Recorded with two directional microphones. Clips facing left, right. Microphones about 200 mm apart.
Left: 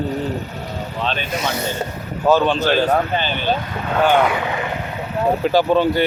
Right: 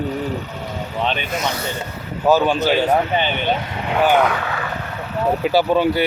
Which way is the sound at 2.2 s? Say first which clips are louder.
Even; 10° right (ahead or behind).